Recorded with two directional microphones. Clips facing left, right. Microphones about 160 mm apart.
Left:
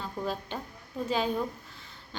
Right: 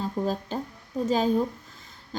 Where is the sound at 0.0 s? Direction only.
40° right (ahead or behind).